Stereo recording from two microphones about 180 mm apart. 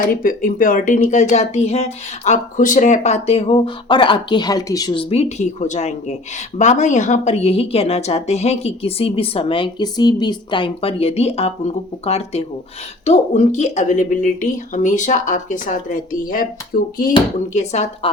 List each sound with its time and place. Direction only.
0.1 s speech: 50° left (ahead or behind)